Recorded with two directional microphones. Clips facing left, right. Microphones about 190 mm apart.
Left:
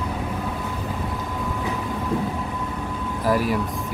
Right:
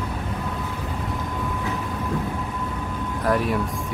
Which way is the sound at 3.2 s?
5° left (ahead or behind).